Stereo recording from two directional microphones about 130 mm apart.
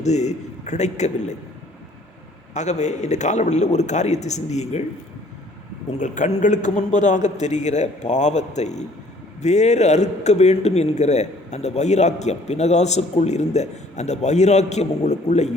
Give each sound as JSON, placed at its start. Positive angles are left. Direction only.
{"t": 0.0, "sound": "a man's voice", "side_deg": 60}
{"t": 2.6, "sound": "a man's voice", "side_deg": 60}
{"t": 5.9, "sound": "a man's voice", "side_deg": 70}